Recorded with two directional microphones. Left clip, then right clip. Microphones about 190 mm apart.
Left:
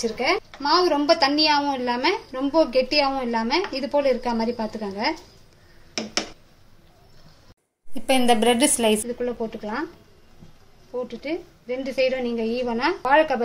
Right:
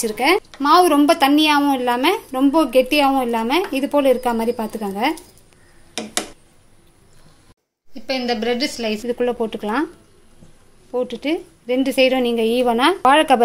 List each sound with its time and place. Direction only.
0.0 s a woman's voice: 50° right (ahead or behind)
7.9 s a woman's voice: 5° left (ahead or behind)
9.0 s a woman's voice: 50° right (ahead or behind)
11.0 s a woman's voice: 45° right (ahead or behind)